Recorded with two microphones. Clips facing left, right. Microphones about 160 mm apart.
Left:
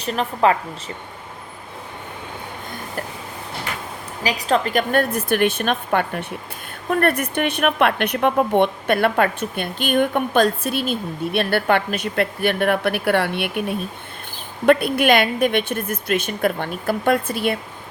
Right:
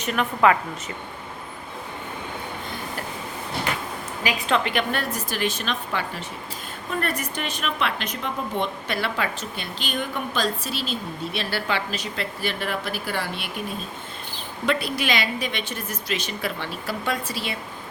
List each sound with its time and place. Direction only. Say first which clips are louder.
0.0 s a woman's voice: left 1 dB; 30° left (ahead or behind)
4.2 s a woman's voice: left 4 dB; 35° left (ahead or behind); by 17.6 s 55° left (ahead or behind)